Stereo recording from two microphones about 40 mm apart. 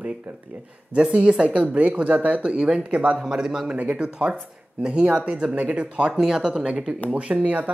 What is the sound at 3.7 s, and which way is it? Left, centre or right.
Speech, right.